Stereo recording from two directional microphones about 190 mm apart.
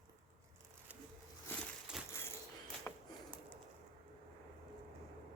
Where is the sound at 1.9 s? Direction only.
5° right (ahead or behind).